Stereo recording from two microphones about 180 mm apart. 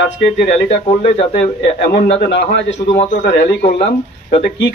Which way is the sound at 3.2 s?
70° left (ahead or behind).